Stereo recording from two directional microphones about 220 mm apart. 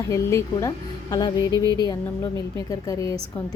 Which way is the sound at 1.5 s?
15° right (ahead or behind).